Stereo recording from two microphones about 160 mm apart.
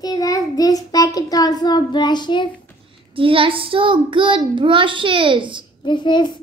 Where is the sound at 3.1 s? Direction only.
35° right (ahead or behind).